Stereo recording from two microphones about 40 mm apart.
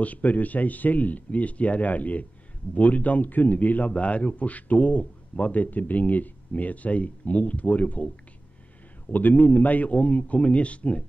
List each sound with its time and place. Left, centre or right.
0.0 s a man's voice: left
9.1 s a man's voice: left